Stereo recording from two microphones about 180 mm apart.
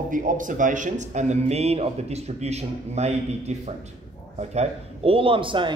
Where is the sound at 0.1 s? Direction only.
50° right (ahead or behind).